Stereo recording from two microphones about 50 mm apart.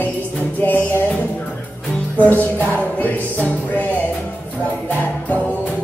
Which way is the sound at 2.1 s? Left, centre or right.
Left.